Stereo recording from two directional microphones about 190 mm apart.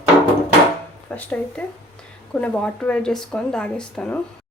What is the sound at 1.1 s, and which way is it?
Speech, 10° left (ahead or behind).